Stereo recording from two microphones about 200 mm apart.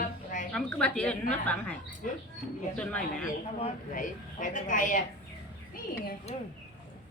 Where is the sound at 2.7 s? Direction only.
5° left (ahead or behind).